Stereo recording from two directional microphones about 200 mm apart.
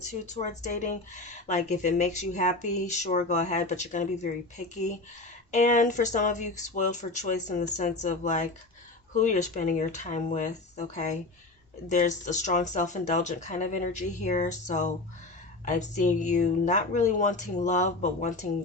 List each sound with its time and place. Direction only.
0.1 s speech: 35° left (ahead or behind)